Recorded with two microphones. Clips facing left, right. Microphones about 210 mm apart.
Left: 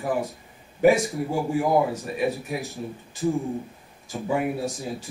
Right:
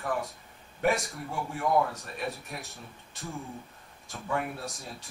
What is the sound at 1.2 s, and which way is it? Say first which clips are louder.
Speech: left 9 dB; 30° left (ahead or behind).